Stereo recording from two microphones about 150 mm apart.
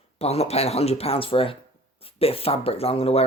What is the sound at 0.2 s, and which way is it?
Speech, 45° left (ahead or behind).